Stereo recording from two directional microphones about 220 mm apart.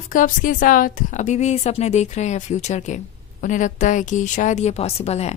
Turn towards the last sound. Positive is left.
turn(degrees=30)  # may be behind; listen again after turning